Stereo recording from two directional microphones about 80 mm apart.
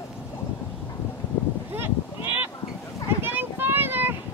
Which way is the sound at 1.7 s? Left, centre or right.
Right.